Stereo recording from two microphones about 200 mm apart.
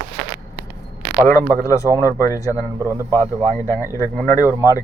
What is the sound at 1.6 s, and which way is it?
Speech, 15° left (ahead or behind).